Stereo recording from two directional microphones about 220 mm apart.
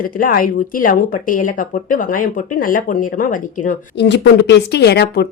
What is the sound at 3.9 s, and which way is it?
Speech, 50° left (ahead or behind).